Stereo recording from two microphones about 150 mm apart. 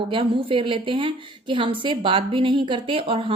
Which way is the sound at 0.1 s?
35° right (ahead or behind).